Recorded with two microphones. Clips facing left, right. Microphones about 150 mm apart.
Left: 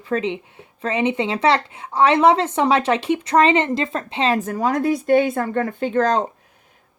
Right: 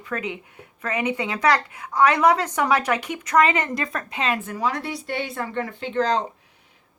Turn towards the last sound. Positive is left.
turn(degrees=45)  # may be behind; listen again after turning